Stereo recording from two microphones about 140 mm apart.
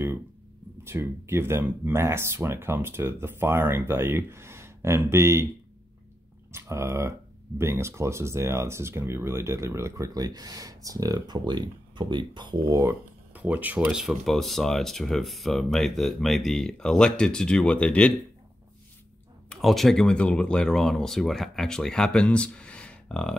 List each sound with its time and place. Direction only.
0.8 s speech: 20° right (ahead or behind)
6.5 s speech: 20° right (ahead or behind)
12.7 s speech: 15° right (ahead or behind); by 18.1 s 10° left (ahead or behind)
19.5 s speech: centre (ahead or behind)